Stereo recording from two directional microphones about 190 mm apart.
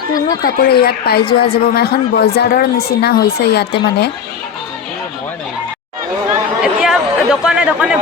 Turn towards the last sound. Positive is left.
turn(degrees=-5)  # may be behind; listen again after turning